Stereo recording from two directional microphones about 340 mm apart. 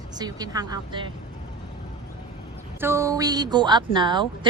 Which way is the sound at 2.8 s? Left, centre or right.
Centre.